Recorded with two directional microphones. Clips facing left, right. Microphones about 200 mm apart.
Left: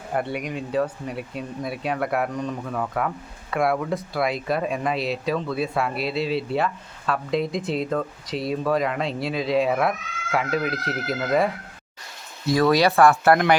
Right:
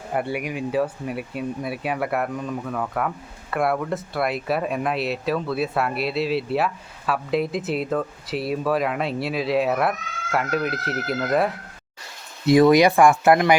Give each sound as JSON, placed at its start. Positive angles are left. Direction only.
{"t": 0.1, "sound": "speech", "side_deg": -5}
{"t": 12.5, "sound": "speech", "side_deg": -20}